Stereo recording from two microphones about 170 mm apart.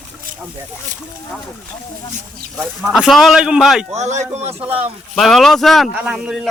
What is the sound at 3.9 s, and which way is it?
Speech, 40° right (ahead or behind).